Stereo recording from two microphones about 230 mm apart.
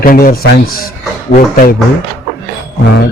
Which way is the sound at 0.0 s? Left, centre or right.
Left.